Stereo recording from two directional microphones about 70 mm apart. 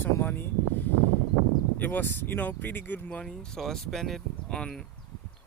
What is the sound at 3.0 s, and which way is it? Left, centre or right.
Speech, centre.